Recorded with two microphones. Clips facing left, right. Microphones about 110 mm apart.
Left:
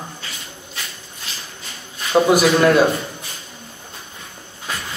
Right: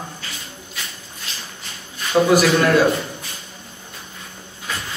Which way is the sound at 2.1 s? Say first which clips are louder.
Left 1 dB; 20° left (ahead or behind).